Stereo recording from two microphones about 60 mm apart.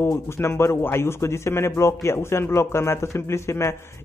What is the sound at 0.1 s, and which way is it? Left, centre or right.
Speech, left.